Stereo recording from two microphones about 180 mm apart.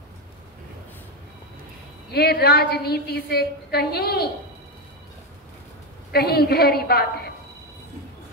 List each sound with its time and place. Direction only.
2.1 s a woman's voice: 60° left (ahead or behind)
6.1 s a woman's voice: 60° left (ahead or behind)